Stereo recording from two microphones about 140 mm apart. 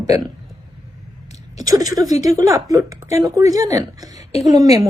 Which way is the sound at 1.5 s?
25° right (ahead or behind).